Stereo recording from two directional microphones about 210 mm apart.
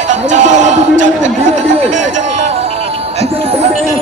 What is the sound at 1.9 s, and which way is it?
Music, 35° right (ahead or behind).